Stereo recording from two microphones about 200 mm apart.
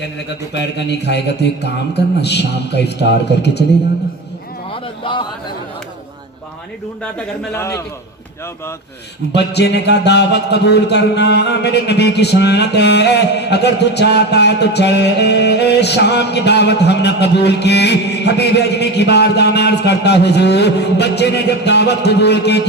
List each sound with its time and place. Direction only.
0.5 s speech: 60° left (ahead or behind)
4.7 s a sound: 25° left (ahead or behind)
7.0 s a man's voice: 10° left (ahead or behind)
9.3 s speech: 55° left (ahead or behind)